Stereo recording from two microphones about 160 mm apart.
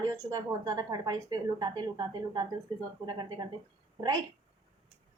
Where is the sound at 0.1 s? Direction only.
20° right (ahead or behind).